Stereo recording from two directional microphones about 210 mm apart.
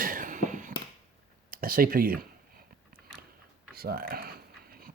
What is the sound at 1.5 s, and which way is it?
Speech, 45° right (ahead or behind).